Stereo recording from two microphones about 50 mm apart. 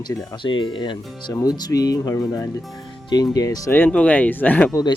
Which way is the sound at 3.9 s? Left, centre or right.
Left.